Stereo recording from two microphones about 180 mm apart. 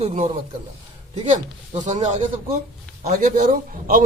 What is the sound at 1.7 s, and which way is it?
A man's voice, 40° right (ahead or behind).